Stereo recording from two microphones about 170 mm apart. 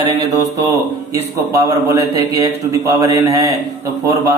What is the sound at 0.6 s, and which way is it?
A man's voice, 20° right (ahead or behind).